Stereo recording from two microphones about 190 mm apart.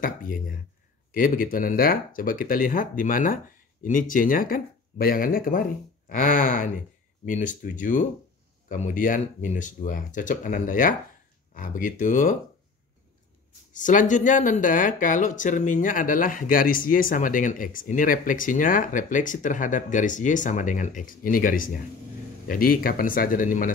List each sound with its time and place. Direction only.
0.0 s speech: 45° left (ahead or behind)
13.7 s speech: 40° left (ahead or behind)